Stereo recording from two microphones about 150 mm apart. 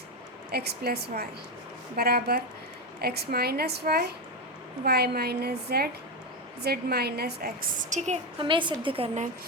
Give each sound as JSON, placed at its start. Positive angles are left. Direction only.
{"t": 0.5, "sound": "a woman's voice", "side_deg": -90}
{"t": 7.9, "sound": "a woman's voice", "side_deg": -50}
{"t": 8.4, "sound": "a woman's voice", "side_deg": -35}